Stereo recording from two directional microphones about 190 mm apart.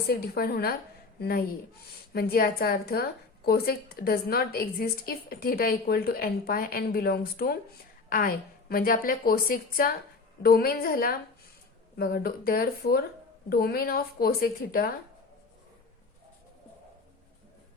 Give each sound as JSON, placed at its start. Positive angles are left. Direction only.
{"t": 0.1, "sound": "a woman's voice", "side_deg": 55}
{"t": 8.7, "sound": "a woman's voice", "side_deg": 50}